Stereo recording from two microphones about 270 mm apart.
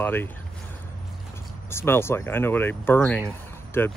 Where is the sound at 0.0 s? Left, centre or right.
Centre.